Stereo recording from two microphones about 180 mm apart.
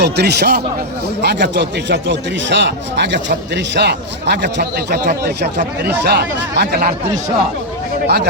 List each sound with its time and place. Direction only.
0.0 s speech: 65° right (ahead or behind)
8.0 s speech: 65° right (ahead or behind)